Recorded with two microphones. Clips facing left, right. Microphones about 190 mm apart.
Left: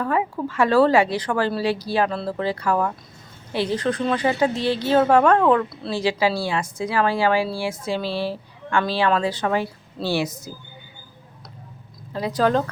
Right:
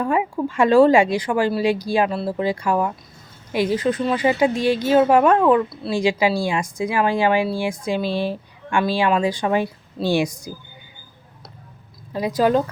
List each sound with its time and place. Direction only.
0.0 s a woman's voice: 15° right (ahead or behind)
12.1 s a woman's voice: 10° right (ahead or behind)